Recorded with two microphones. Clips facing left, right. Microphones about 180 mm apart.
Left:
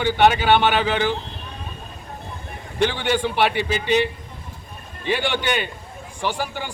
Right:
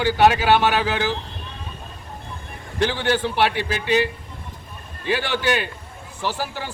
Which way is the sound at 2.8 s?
Centre (ahead or behind).